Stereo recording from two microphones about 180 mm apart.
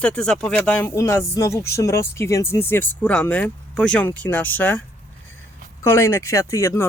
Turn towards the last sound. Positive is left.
turn(degrees=15)  # may be behind; listen again after turning